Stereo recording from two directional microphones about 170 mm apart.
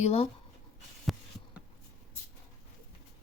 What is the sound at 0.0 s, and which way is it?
Speech, 35° left (ahead or behind).